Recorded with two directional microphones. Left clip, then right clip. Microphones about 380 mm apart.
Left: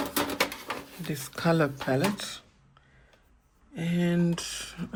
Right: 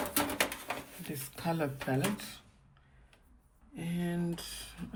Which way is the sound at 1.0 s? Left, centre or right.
Centre.